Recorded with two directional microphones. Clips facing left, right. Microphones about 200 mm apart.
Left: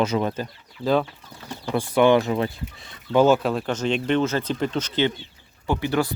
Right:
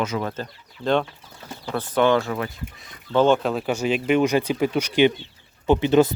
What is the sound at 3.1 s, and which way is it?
Speech, 5° left (ahead or behind).